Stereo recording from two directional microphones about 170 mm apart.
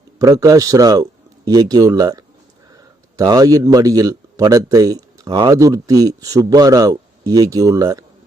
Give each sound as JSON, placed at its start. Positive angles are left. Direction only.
{"t": 0.2, "sound": "a man's voice", "side_deg": -20}